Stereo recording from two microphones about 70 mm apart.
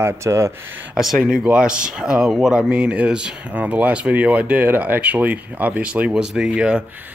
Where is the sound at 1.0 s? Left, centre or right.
Centre.